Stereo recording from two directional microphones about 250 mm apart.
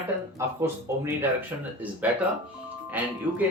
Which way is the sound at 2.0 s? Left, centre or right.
Centre.